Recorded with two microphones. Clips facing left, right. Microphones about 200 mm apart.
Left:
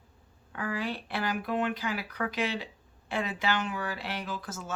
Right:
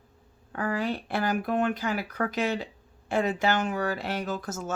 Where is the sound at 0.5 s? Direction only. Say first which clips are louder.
Right 5 dB; 45° right (ahead or behind).